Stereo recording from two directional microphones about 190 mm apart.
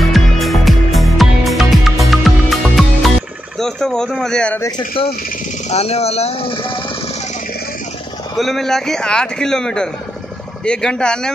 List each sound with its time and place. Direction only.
0.0 s music: centre (ahead or behind)
3.5 s a man's voice: 5° left (ahead or behind)
4.6 s speech: 25° left (ahead or behind)
8.4 s a man's voice: centre (ahead or behind)